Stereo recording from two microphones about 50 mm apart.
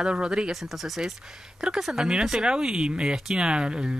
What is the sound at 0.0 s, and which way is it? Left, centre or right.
Speech, centre.